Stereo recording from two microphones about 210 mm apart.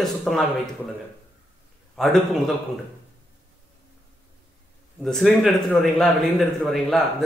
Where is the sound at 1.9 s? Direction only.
Centre (ahead or behind).